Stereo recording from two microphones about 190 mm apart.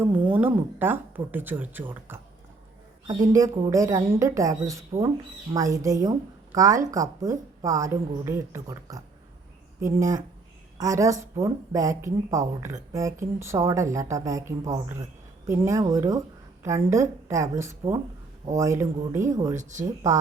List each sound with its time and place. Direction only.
0.0 s a woman's voice: 10° right (ahead or behind)